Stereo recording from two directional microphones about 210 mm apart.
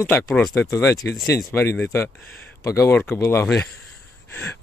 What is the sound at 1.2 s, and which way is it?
A man's voice, 15° left (ahead or behind).